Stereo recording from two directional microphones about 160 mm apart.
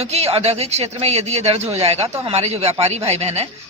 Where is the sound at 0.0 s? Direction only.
40° right (ahead or behind).